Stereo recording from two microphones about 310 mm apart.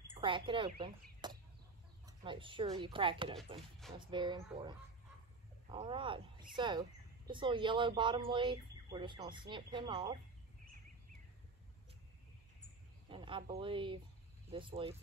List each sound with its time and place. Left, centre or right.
0.1 s speech: centre
13.1 s speech: centre